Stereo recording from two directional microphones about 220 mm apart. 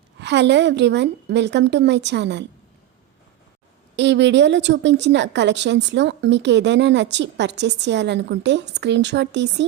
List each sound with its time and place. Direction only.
0.2 s a woman's voice: 50° right (ahead or behind)
3.9 s a woman's voice: 55° right (ahead or behind)